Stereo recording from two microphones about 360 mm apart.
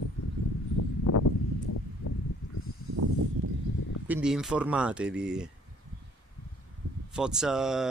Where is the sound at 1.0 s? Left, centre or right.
Left.